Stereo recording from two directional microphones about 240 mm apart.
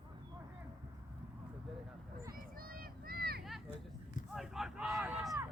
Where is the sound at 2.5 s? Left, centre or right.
Right.